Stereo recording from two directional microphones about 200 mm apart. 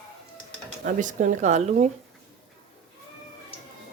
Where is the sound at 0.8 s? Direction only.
40° right (ahead or behind).